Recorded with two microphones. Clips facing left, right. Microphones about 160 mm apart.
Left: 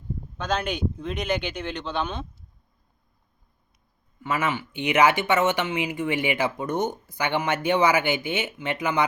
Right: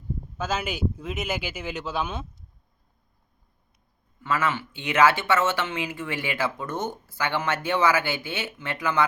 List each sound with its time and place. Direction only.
0.3 s speech: 5° right (ahead or behind)
4.2 s speech: 15° left (ahead or behind)